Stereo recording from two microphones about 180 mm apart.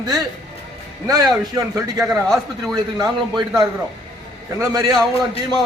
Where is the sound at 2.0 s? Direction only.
Centre (ahead or behind).